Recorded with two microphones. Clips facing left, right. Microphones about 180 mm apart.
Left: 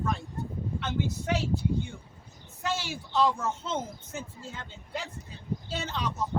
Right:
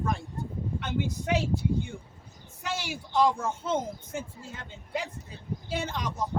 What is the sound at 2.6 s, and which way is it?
A man's voice, 10° right (ahead or behind).